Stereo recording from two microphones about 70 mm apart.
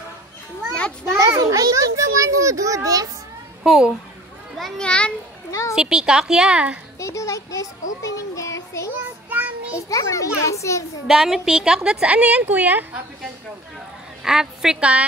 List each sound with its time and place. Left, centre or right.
1.2 s a child's voice: right
3.6 s a woman's voice: centre
4.6 s a child's voice: centre
4.8 s a child's voice: centre
5.5 s a child's voice: left
5.8 s a woman's voice: centre
7.0 s a child's voice: left
11.1 s a woman's voice: centre; by 13.0 s right
14.2 s a woman's voice: centre